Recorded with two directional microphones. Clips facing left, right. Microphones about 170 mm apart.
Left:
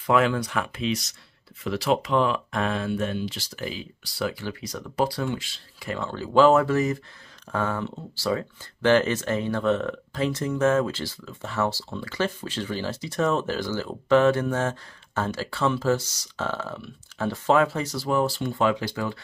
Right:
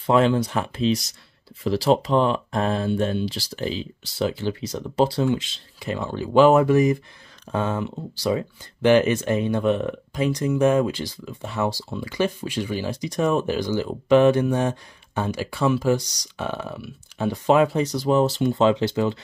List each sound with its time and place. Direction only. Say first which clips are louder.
0.0 s speech: right 3 dB; 30° right (ahead or behind)